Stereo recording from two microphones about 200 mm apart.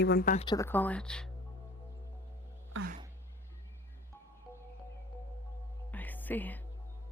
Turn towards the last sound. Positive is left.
turn(degrees=10)  # may be behind; listen again after turning